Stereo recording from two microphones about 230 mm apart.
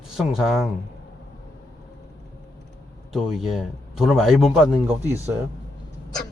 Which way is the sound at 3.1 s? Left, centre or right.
Centre.